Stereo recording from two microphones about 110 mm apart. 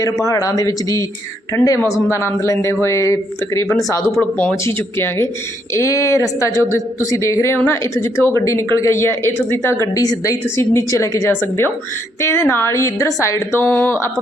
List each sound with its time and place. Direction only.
0.0 s a woman's voice: 30° left (ahead or behind)
4.2 s a woman's voice: 15° left (ahead or behind)
9.8 s a woman's voice: 30° left (ahead or behind); by 14.1 s 15° left (ahead or behind)